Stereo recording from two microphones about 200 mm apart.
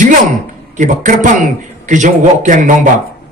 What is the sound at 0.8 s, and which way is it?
A man's voice, 40° right (ahead or behind).